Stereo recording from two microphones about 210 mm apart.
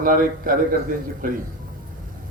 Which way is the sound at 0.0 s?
40° right (ahead or behind).